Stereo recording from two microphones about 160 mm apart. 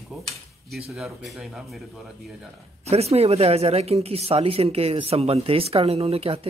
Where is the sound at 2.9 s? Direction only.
40° right (ahead or behind).